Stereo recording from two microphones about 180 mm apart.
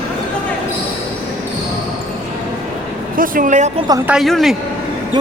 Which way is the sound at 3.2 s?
45° right (ahead or behind).